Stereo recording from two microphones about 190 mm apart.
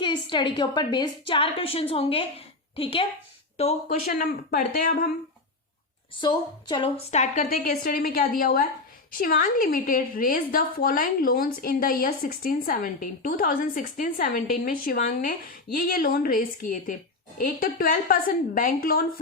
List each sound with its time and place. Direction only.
0.0 s a woman's voice: 25° left (ahead or behind)
4.0 s a woman's voice: 50° left (ahead or behind)
6.1 s a woman's voice: 25° left (ahead or behind)
7.6 s a woman's voice: 50° left (ahead or behind)